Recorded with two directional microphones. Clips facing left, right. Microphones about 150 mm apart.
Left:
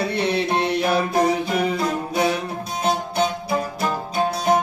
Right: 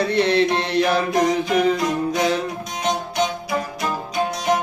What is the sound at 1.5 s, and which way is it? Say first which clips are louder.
Music: right 3 dB; 10° left (ahead or behind).